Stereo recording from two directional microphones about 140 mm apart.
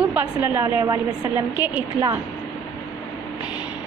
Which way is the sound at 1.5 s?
10° right (ahead or behind).